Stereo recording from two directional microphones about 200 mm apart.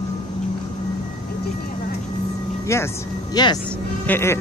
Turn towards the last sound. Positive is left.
turn(degrees=10)  # may be behind; listen again after turning